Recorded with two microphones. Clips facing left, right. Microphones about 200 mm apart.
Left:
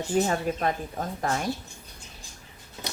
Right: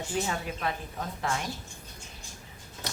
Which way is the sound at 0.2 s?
45° left (ahead or behind).